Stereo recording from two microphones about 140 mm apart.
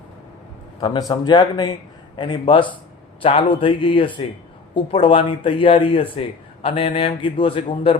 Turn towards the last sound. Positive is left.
turn(degrees=40)  # may be behind; listen again after turning